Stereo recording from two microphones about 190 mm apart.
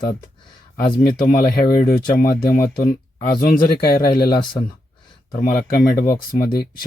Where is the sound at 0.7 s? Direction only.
50° left (ahead or behind).